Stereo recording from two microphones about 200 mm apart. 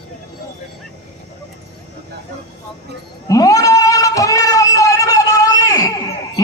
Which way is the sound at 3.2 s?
15° left (ahead or behind).